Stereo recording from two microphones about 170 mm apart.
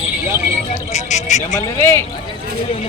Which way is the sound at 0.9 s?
45° left (ahead or behind).